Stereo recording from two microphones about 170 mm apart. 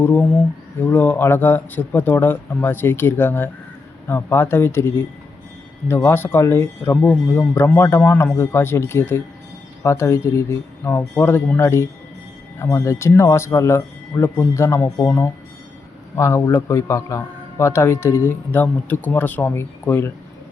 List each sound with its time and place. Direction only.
0.0 s a man's voice: 10° left (ahead or behind)